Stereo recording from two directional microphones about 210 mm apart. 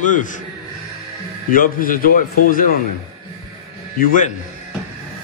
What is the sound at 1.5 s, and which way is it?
A man's voice, 40° left (ahead or behind).